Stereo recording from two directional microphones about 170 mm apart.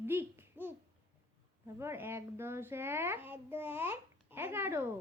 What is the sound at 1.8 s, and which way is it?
A child's voice, 15° right (ahead or behind).